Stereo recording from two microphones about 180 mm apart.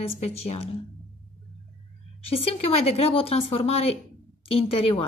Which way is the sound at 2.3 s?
35° left (ahead or behind).